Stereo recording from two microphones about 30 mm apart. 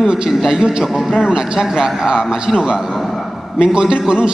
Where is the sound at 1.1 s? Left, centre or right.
Right.